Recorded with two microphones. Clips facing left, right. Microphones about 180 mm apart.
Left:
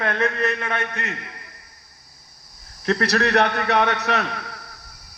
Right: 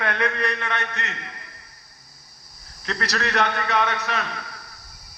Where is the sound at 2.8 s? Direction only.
55° left (ahead or behind).